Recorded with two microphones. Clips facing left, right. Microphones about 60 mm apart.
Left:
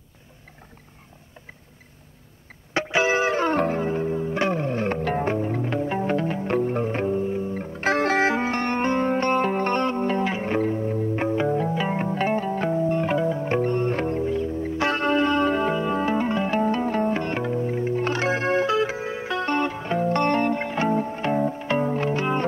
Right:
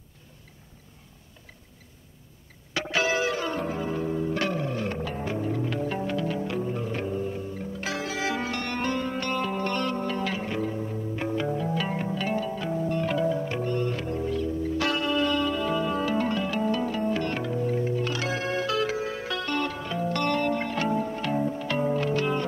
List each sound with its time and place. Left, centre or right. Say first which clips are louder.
2.7 s music: left 4 dB; left
3.4 s music: left 7 dB; left
4.3 s music: left 4 dB; left
4.6 s music: left 5 dB; left
8.3 s music: left 6 dB; left
11.2 s music: left 4 dB; left
12.0 s music: left 5 dB; left
14.2 s music: left 3 dB; left
17.2 s music: left 3 dB; left